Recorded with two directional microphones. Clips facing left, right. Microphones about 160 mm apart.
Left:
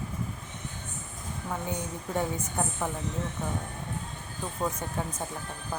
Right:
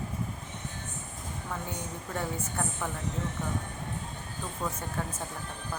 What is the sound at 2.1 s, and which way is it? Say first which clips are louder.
Speech: left 3 dB; 15° left (ahead or behind).